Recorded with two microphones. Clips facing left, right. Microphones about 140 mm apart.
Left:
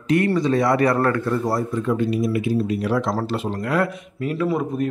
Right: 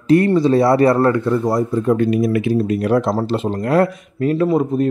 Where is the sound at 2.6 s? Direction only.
50° right (ahead or behind).